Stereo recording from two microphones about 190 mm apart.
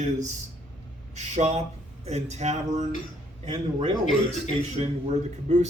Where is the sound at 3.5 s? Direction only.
25° right (ahead or behind).